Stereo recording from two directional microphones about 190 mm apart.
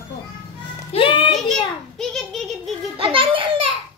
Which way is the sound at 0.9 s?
25° left (ahead or behind).